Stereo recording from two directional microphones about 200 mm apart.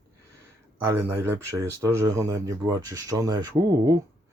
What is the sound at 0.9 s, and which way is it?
Speech, 10° right (ahead or behind).